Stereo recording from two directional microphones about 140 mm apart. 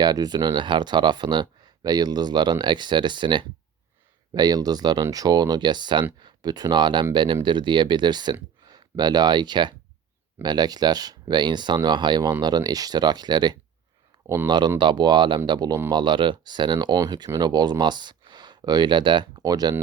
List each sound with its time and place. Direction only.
0.0 s speech: 30° right (ahead or behind)